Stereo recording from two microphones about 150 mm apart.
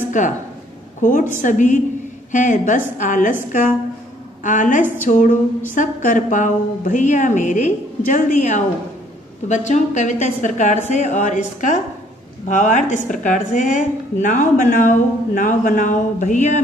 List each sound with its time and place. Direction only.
0.2 s a woman's voice: 55° left (ahead or behind)
4.4 s a woman's voice: 60° left (ahead or behind)